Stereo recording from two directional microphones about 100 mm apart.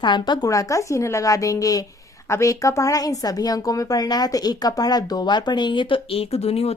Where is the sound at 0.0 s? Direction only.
50° left (ahead or behind).